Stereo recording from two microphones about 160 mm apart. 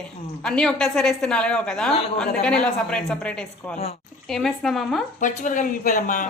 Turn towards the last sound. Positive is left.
turn(degrees=55)  # may be behind; listen again after turning